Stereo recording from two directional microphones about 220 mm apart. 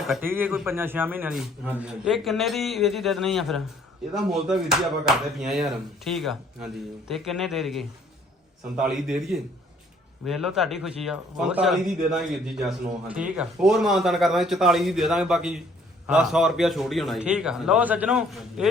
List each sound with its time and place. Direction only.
0.1 s a man's voice: 10° right (ahead or behind)